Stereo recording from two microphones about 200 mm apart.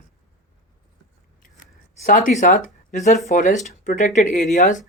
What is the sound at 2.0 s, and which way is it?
Speech, 40° left (ahead or behind).